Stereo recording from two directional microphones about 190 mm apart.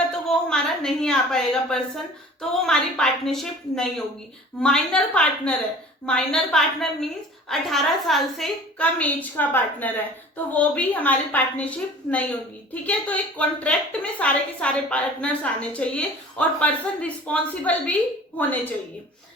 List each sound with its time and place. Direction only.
0.3 s a woman's voice: 5° left (ahead or behind)